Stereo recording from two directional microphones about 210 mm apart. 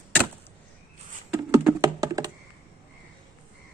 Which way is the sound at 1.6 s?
15° right (ahead or behind).